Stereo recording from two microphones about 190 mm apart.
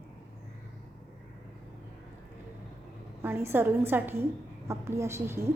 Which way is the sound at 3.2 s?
10° right (ahead or behind).